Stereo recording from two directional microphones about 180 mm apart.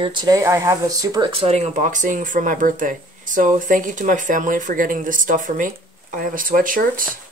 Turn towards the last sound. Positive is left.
turn(degrees=-50)  # may be behind; listen again after turning